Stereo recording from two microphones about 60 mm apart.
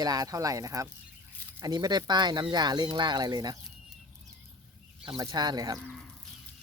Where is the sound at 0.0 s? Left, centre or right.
Right.